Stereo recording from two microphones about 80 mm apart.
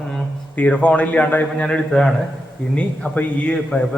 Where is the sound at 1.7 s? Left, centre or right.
Centre.